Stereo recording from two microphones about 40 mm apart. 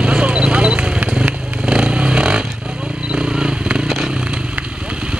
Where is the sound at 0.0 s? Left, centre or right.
Right.